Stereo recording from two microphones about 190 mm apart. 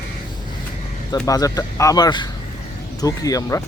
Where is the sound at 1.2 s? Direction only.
20° left (ahead or behind).